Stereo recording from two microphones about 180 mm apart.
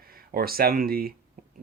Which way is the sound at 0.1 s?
55° right (ahead or behind).